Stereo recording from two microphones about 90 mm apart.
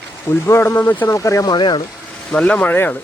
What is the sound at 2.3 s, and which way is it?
Speech, 10° left (ahead or behind).